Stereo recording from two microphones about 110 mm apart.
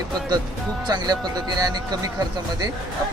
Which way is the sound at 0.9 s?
40° right (ahead or behind).